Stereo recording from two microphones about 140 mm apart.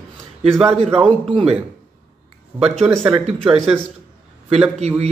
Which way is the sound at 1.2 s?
45° right (ahead or behind).